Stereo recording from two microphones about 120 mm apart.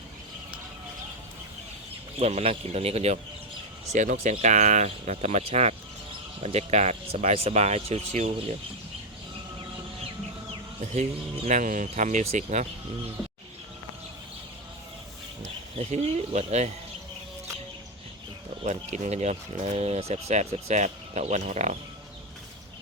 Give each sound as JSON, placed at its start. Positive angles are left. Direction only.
{"t": 2.1, "sound": "speech", "side_deg": -60}
{"t": 3.9, "sound": "speech", "side_deg": -90}
{"t": 11.4, "sound": "speech", "side_deg": -90}
{"t": 15.7, "sound": "speech", "side_deg": -65}
{"t": 18.6, "sound": "speech", "side_deg": -70}